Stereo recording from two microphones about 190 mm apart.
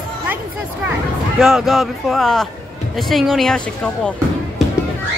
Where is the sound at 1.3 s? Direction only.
Centre (ahead or behind).